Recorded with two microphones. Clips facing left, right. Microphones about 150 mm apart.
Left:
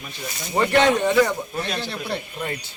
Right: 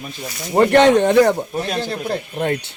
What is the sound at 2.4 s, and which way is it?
Speech, 65° right (ahead or behind).